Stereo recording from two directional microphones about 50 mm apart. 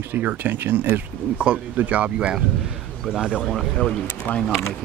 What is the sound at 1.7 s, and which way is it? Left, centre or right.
Speech, right.